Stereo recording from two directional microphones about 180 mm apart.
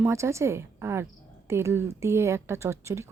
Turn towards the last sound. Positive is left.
turn(degrees=-15)  # may be behind; listen again after turning